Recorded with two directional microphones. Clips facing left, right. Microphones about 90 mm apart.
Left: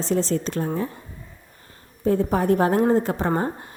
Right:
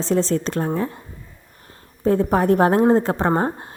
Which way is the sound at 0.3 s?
45° right (ahead or behind).